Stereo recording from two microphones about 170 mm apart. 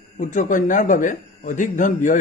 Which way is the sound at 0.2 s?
45° left (ahead or behind).